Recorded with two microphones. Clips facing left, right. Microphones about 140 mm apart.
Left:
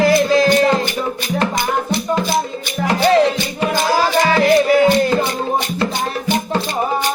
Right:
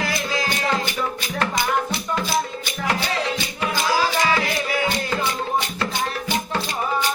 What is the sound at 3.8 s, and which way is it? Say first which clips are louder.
Music: left 5 dB; 50° left (ahead or behind).